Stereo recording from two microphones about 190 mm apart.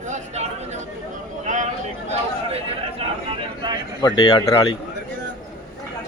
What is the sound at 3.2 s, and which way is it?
Vehicle, 25° right (ahead or behind).